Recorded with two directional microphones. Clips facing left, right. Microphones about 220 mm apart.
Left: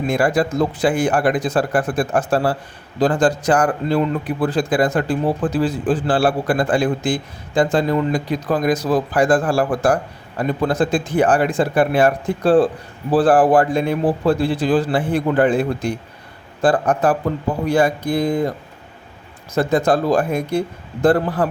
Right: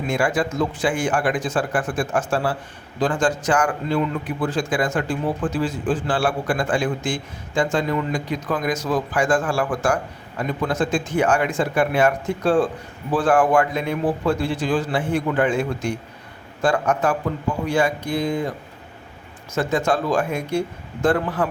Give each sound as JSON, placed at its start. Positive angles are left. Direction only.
{"t": 0.1, "sound": "a man's voice", "side_deg": 35}
{"t": 19.5, "sound": "a man's voice", "side_deg": 35}